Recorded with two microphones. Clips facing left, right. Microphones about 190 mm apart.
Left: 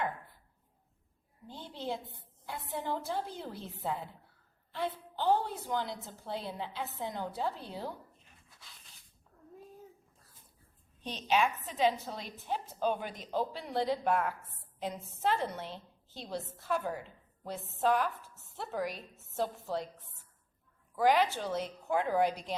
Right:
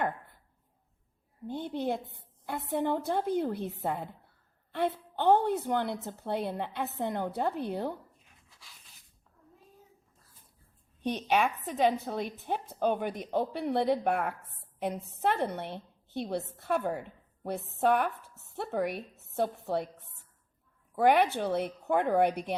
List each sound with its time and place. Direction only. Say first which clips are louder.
1.5 s a woman's voice: right 7 dB; 55° right (ahead or behind)
11.0 s a woman's voice: right 2 dB; 55° right (ahead or behind)
20.9 s a woman's voice: right 3 dB; 60° right (ahead or behind)